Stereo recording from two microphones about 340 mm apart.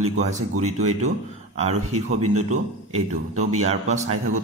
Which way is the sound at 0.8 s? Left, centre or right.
Centre.